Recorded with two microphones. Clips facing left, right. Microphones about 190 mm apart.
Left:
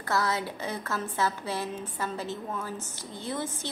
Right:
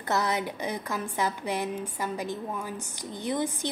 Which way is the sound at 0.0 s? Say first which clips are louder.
Right 1 dB; 20° right (ahead or behind).